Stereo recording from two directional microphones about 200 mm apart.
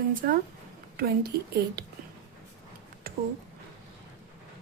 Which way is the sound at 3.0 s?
45° right (ahead or behind).